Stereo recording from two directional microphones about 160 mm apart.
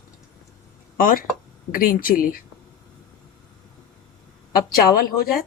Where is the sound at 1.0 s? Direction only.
60° left (ahead or behind).